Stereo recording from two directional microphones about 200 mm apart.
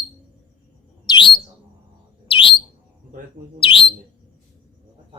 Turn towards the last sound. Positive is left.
turn(degrees=25)  # may be behind; listen again after turning